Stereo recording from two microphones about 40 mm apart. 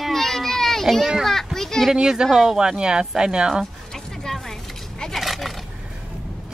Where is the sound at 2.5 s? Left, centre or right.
Centre.